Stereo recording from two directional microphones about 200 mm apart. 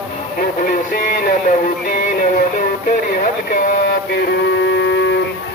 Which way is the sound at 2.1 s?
45° left (ahead or behind).